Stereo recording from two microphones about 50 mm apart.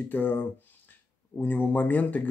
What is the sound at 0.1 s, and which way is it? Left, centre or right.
Speech, left.